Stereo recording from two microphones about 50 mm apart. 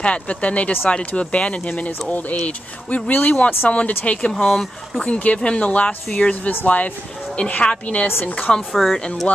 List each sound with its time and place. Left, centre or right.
0.0 s speech: left
4.3 s speech: centre
5.0 s speech: left
8.5 s speech: centre